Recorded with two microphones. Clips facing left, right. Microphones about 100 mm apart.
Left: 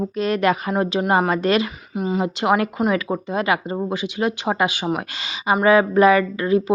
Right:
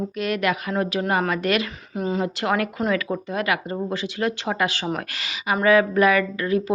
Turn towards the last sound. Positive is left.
turn(degrees=25)  # may be behind; listen again after turning